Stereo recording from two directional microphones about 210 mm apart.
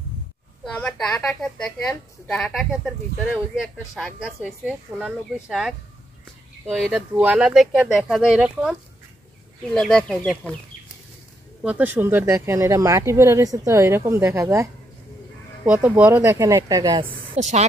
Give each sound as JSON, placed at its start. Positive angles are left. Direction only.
{"t": 0.7, "sound": "speech", "side_deg": 5}
{"t": 9.8, "sound": "speech", "side_deg": 5}
{"t": 11.6, "sound": "speech", "side_deg": -10}
{"t": 17.4, "sound": "speech", "side_deg": -35}